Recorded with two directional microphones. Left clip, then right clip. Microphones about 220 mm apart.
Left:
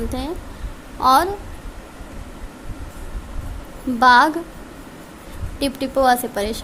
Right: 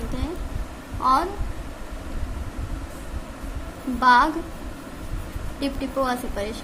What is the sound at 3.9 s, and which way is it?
Speech, 45° left (ahead or behind).